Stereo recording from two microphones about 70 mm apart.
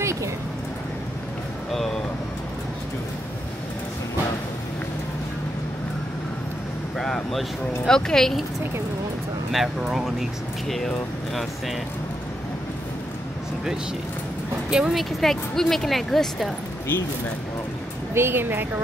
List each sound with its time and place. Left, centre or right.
0.0 s a sound: right
7.0 s speech: centre
9.5 s speech: centre
14.7 s speech: centre
15.0 s speech: centre
18.1 s a woman's voice: right